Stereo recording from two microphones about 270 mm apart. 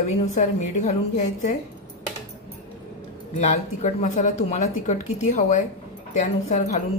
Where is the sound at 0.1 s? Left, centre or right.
Left.